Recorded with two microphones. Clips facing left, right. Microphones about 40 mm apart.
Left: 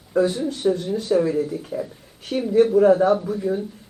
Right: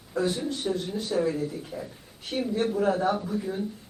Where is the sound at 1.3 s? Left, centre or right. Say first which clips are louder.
Left 7 dB; centre.